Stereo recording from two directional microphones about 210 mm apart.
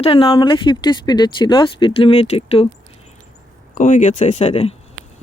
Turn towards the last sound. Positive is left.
turn(degrees=30)  # may be behind; listen again after turning